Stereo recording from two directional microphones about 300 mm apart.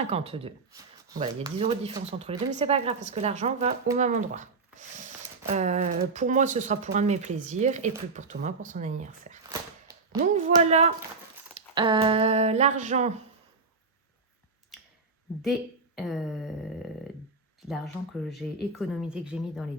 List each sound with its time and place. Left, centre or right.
0.0 s speech: centre
16.0 s speech: centre
17.7 s speech: centre